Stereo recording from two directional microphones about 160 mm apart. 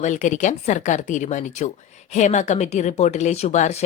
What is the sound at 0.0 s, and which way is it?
A woman's voice, 50° left (ahead or behind).